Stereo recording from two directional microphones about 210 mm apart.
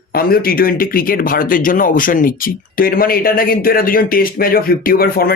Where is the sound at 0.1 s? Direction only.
45° left (ahead or behind).